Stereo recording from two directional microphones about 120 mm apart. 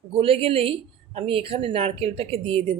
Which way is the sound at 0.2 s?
50° right (ahead or behind).